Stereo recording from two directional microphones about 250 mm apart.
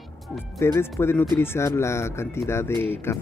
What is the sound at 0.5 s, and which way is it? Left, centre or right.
Speech, centre.